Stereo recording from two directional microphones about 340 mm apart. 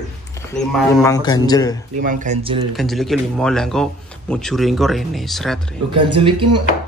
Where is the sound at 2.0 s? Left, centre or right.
Right.